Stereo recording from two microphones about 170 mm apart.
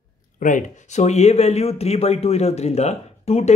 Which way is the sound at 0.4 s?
50° left (ahead or behind).